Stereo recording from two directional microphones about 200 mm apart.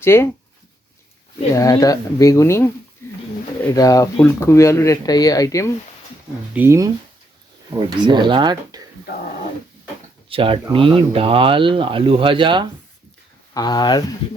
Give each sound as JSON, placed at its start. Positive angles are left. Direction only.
{"t": 0.0, "sound": "speech", "side_deg": 10}
{"t": 1.5, "sound": "speech", "side_deg": 15}
{"t": 6.5, "sound": "speech", "side_deg": -10}
{"t": 10.2, "sound": "speech", "side_deg": -25}
{"t": 13.5, "sound": "speech", "side_deg": 20}